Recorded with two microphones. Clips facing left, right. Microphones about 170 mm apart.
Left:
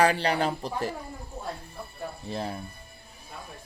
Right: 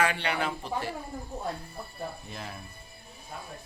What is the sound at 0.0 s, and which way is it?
Speech, 35° left (ahead or behind).